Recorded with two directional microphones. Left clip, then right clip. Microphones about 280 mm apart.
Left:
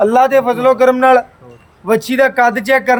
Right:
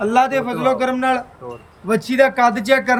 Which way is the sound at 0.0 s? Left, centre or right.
Centre.